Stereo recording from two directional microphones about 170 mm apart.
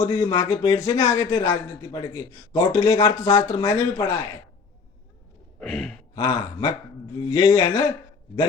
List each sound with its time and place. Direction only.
0.0 s speech: 25° left (ahead or behind)
5.5 s sigh: centre (ahead or behind)
6.1 s speech: 25° left (ahead or behind)